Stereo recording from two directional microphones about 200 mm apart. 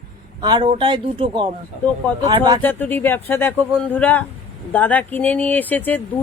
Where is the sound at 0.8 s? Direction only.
20° right (ahead or behind).